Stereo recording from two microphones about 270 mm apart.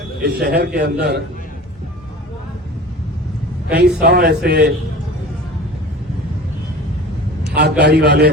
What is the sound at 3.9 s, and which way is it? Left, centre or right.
Speech, right.